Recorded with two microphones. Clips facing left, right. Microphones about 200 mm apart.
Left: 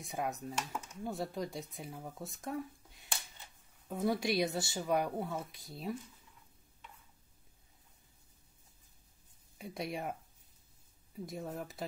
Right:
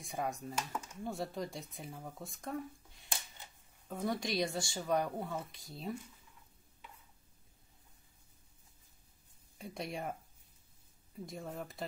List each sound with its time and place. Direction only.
0.0 s speech: centre (ahead or behind)
3.9 s speech: 5° left (ahead or behind)
9.6 s speech: centre (ahead or behind)
11.1 s speech: 5° left (ahead or behind)